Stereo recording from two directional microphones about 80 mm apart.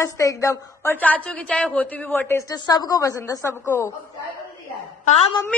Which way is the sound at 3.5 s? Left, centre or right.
Left.